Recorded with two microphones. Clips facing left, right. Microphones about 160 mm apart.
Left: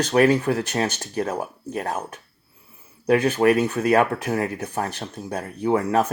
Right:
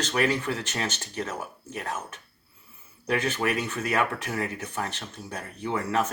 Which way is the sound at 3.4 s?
35° left (ahead or behind).